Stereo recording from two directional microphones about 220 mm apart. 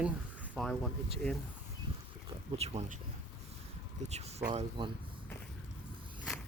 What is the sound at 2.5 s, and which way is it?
Speech, 30° right (ahead or behind).